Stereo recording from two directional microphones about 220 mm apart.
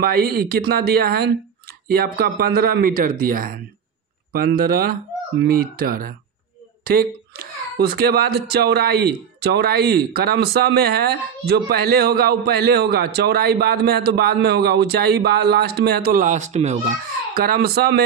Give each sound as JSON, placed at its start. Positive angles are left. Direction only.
{"t": 0.0, "sound": "a man's voice", "side_deg": -45}